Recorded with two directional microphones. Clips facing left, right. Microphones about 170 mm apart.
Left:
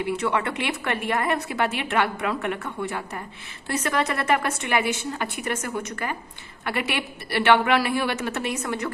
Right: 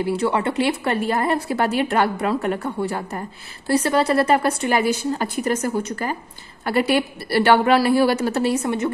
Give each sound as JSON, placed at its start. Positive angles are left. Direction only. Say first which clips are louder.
{"t": 0.0, "sound": "a woman's voice", "louder": "right 4 dB", "side_deg": -35}